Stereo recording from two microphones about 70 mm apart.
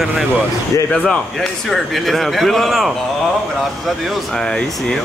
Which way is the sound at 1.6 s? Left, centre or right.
Centre.